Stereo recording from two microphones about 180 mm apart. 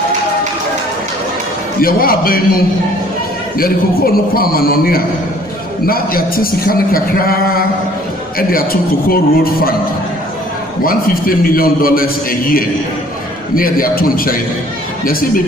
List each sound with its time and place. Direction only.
1.8 s speech: 55° left (ahead or behind)
3.5 s a man's voice: 55° left (ahead or behind)
10.8 s a man's voice: 55° left (ahead or behind)